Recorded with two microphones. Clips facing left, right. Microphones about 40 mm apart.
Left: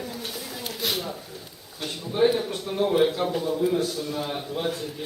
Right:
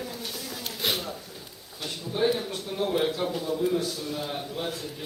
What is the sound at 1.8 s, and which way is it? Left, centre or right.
Speech, centre.